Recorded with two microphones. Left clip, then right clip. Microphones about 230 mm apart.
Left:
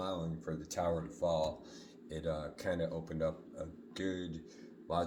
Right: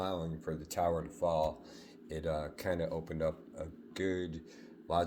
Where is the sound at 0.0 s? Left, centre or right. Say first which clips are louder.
Right 2 dB; right.